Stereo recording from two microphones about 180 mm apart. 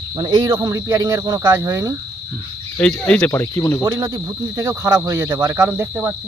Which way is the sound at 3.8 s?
15° right (ahead or behind).